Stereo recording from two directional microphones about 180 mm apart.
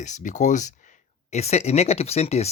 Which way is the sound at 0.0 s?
45° left (ahead or behind).